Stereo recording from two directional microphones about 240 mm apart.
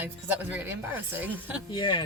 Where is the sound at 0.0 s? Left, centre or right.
Centre.